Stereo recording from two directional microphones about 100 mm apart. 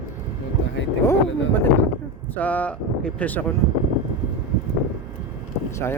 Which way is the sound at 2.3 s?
15° left (ahead or behind).